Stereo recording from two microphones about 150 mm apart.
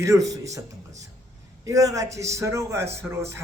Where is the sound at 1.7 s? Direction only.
25° right (ahead or behind).